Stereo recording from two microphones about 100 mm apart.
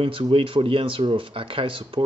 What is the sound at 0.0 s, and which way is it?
Speech, 65° right (ahead or behind).